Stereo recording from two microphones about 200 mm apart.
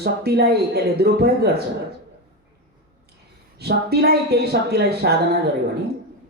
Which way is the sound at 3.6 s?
55° right (ahead or behind).